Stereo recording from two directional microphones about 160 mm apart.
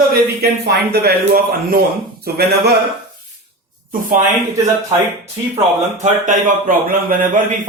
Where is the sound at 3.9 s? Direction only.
55° right (ahead or behind).